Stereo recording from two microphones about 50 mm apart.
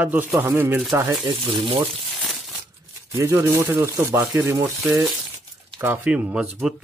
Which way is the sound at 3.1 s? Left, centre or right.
Right.